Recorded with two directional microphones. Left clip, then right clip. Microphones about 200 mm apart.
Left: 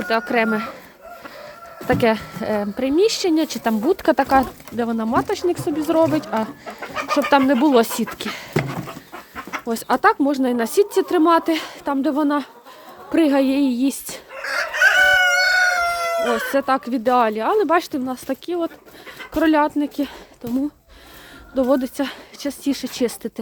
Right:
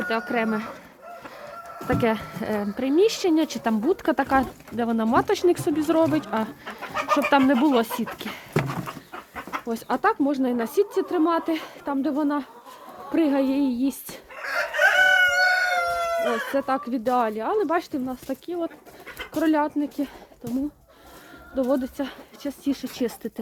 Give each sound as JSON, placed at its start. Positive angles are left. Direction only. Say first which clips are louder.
{"t": 0.1, "sound": "speech", "louder": "left 8 dB", "side_deg": 10}
{"t": 1.9, "sound": "speech", "louder": "left 6 dB", "side_deg": 5}
{"t": 4.9, "sound": "speech", "louder": "right 1 dB", "side_deg": -15}
{"t": 14.4, "sound": "chicken", "louder": "left 4 dB", "side_deg": 45}
{"t": 16.6, "sound": "speech", "louder": "left 5 dB", "side_deg": 20}
{"t": 21.5, "sound": "speech", "louder": "left 5 dB", "side_deg": 25}